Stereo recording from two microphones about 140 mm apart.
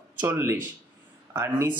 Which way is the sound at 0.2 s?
15° right (ahead or behind).